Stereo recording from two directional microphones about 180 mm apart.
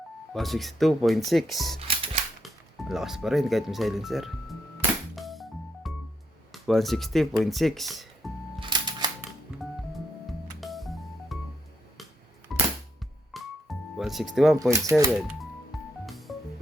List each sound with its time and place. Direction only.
0.3 s speech: centre (ahead or behind)
5.1 s music: centre (ahead or behind)
6.5 s speech: centre (ahead or behind)
8.6 s typewriter: 25° right (ahead or behind)
10.6 s music: centre (ahead or behind)
12.5 s music: centre (ahead or behind)
14.3 s speech: centre (ahead or behind)
14.7 s speech: 15° right (ahead or behind)
15.1 s speech: 5° right (ahead or behind)
15.7 s music: centre (ahead or behind)